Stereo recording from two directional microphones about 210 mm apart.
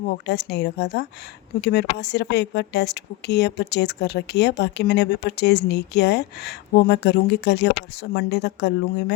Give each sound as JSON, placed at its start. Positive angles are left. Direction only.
{"t": 0.3, "sound": "speech", "side_deg": 55}